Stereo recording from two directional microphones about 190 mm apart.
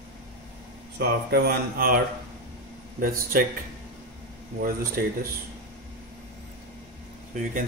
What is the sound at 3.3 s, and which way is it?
Speech, 50° right (ahead or behind).